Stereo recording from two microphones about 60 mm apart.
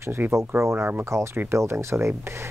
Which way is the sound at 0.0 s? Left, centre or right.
Right.